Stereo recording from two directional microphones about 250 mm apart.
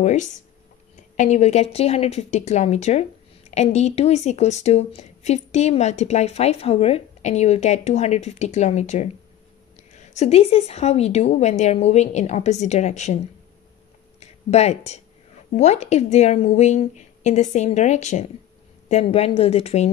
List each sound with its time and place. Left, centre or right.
0.0 s speech: left
14.2 s speech: left